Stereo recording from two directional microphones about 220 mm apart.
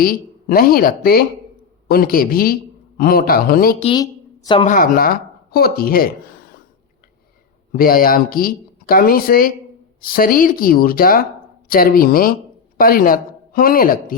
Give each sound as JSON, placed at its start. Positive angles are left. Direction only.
{"t": 0.0, "sound": "speech", "side_deg": 40}
{"t": 3.8, "sound": "a woman's voice", "side_deg": 20}
{"t": 4.6, "sound": "speech", "side_deg": 35}
{"t": 7.7, "sound": "speech", "side_deg": 40}